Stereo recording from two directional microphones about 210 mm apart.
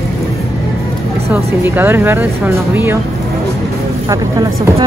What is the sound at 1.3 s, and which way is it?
Speech, 10° right (ahead or behind).